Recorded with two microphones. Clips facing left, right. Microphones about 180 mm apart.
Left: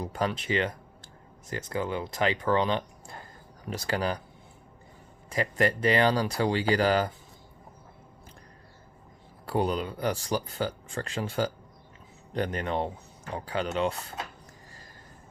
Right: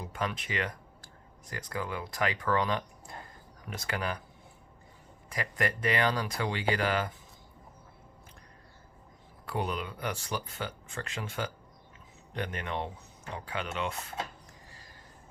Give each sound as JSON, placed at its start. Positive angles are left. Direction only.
{"t": 0.0, "sound": "speech", "side_deg": 35}
{"t": 5.3, "sound": "speech", "side_deg": 30}
{"t": 9.5, "sound": "speech", "side_deg": 35}